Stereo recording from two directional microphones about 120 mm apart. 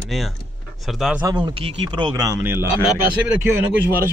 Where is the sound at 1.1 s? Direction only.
35° right (ahead or behind).